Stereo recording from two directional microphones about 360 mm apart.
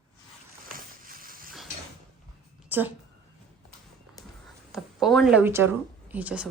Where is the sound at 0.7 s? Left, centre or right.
Right.